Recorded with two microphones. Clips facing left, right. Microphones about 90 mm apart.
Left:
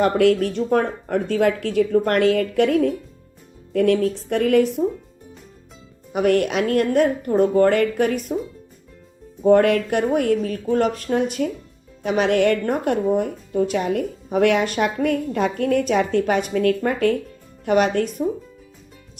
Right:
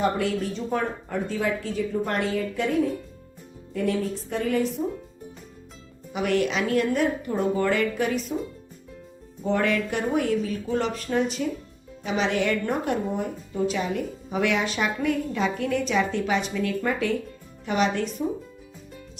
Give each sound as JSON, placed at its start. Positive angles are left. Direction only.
{"t": 0.0, "sound": "speech", "side_deg": 70}
{"t": 6.1, "sound": "a woman's voice", "side_deg": 50}
{"t": 9.4, "sound": "a woman's voice", "side_deg": 55}